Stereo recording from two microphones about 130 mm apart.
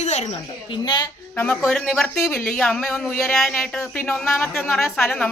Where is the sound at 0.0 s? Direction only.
60° left (ahead or behind).